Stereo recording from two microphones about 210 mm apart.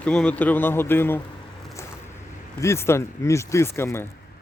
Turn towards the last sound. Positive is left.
turn(degrees=10)  # may be behind; listen again after turning